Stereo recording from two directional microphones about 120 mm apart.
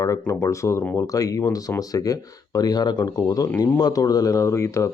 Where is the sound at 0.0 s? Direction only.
25° left (ahead or behind).